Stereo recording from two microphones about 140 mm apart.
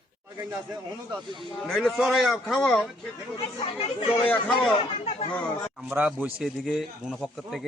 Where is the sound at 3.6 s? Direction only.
45° left (ahead or behind).